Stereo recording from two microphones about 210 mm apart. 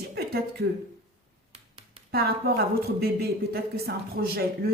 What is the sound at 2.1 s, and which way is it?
A woman's voice, 50° right (ahead or behind).